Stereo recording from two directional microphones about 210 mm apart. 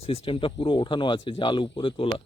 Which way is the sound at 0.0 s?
25° left (ahead or behind).